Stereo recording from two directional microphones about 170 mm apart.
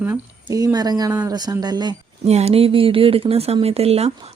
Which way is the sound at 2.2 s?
40° right (ahead or behind).